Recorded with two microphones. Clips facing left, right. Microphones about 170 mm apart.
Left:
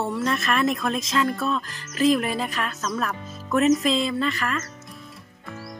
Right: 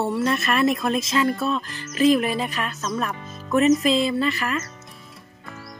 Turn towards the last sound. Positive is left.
turn(degrees=-5)  # may be behind; listen again after turning